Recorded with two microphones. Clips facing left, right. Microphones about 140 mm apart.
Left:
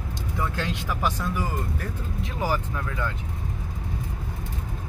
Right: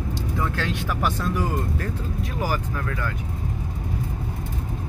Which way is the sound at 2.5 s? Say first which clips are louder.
Right 1 dB; 20° left (ahead or behind).